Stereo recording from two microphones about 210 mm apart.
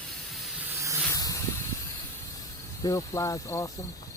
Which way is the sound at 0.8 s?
15° right (ahead or behind).